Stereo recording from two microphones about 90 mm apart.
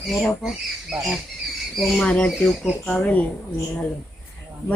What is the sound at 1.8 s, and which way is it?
Speech, 5° left (ahead or behind).